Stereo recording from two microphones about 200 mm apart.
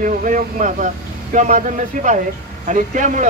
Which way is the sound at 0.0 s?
40° right (ahead or behind).